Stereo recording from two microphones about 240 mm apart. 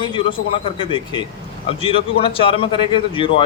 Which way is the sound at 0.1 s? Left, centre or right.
Left.